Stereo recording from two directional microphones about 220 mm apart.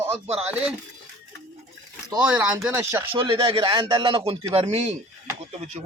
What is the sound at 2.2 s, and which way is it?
Speech, 5° right (ahead or behind).